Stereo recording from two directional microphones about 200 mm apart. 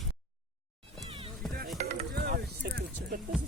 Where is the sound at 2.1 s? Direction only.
50° right (ahead or behind).